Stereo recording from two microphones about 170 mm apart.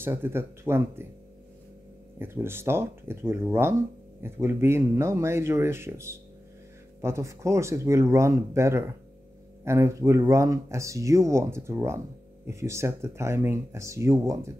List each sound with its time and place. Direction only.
0.0 s speech: 15° right (ahead or behind)
2.1 s speech: 15° right (ahead or behind)